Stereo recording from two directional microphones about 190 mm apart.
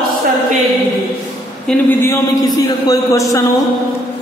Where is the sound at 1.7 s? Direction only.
10° left (ahead or behind).